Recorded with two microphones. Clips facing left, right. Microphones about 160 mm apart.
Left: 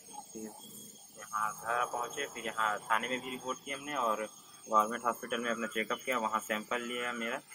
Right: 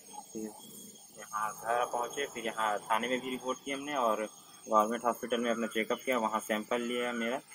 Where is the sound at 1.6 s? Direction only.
35° right (ahead or behind).